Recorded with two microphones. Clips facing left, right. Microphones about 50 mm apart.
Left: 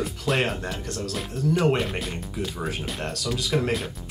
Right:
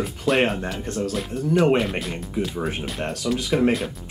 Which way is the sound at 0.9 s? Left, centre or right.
Right.